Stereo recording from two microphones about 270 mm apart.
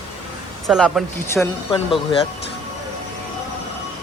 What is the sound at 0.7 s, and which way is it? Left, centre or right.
Speech, centre.